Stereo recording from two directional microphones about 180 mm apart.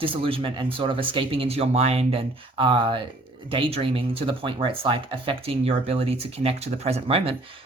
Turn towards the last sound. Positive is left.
turn(degrees=-35)  # may be behind; listen again after turning